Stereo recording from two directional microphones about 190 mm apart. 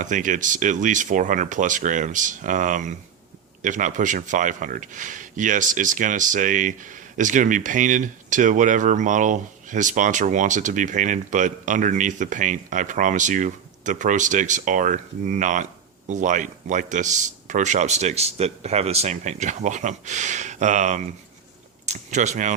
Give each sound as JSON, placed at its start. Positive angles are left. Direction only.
{"t": 0.0, "sound": "speech", "side_deg": -40}